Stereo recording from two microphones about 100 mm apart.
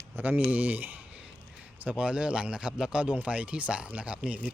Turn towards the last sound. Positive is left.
turn(degrees=-10)  # may be behind; listen again after turning